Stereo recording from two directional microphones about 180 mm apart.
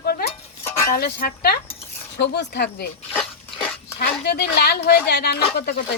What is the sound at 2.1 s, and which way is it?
Speech, 70° left (ahead or behind).